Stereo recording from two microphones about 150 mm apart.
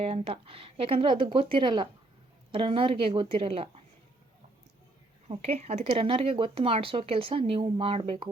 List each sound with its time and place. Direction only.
0.0 s speech: 40° right (ahead or behind)
5.3 s speech: 45° right (ahead or behind)